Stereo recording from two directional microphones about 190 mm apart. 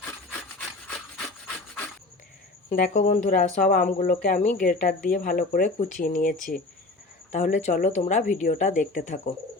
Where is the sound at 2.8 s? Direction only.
45° left (ahead or behind).